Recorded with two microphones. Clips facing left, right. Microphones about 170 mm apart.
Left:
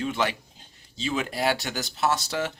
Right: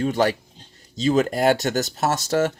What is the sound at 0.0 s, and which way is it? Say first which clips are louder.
Speech: right 7 dB; 40° right (ahead or behind).